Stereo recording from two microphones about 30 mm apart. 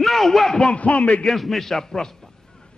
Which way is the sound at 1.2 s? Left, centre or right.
Centre.